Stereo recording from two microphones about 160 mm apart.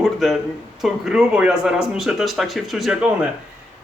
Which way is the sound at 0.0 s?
Centre (ahead or behind).